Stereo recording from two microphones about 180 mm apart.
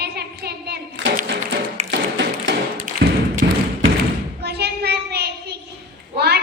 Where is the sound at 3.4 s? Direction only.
55° right (ahead or behind).